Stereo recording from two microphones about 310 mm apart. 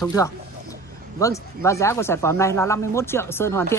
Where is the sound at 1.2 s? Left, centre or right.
Centre.